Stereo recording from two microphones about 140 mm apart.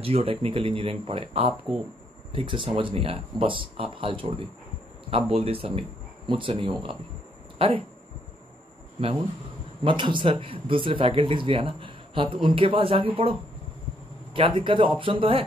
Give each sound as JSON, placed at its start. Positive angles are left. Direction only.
{"t": 0.0, "sound": "speech", "side_deg": -40}
{"t": 9.8, "sound": "speech", "side_deg": -35}